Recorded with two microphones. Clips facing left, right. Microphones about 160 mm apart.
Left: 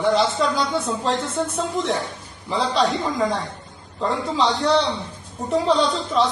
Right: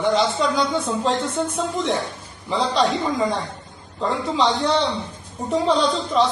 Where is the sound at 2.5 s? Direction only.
Centre (ahead or behind).